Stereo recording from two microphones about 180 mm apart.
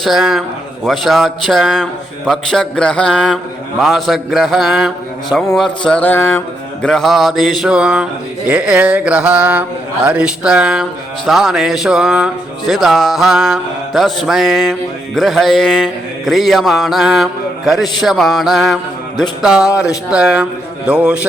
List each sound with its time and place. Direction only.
0.0 s music: centre (ahead or behind)
5.9 s a sound: 10° left (ahead or behind)
6.8 s music: centre (ahead or behind)
8.4 s mantra: 5° right (ahead or behind)
11.3 s music: centre (ahead or behind)